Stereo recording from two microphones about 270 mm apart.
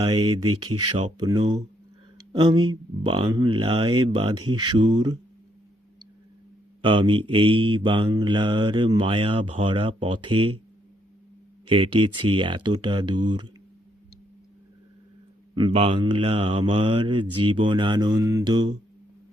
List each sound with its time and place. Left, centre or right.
0.0 s speech: centre
0.9 s mantra: centre
2.3 s speech: centre
6.8 s mantra: centre
11.6 s speech: centre
15.5 s mantra: centre
17.3 s speech: centre